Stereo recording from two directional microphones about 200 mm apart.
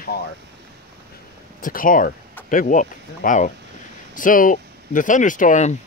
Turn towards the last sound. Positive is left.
turn(degrees=35)  # may be behind; listen again after turning